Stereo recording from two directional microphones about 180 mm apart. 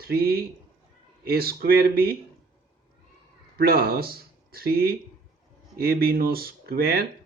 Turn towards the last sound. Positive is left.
turn(degrees=-60)  # may be behind; listen again after turning